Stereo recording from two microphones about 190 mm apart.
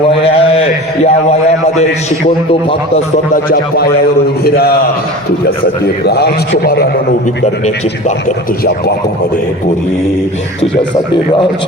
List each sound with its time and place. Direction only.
0.0 s a sound: 30° left (ahead or behind)
2.5 s a man's voice: 30° left (ahead or behind)
3.3 s a man's voice: 55° left (ahead or behind)
7.4 s a man's voice: 35° left (ahead or behind)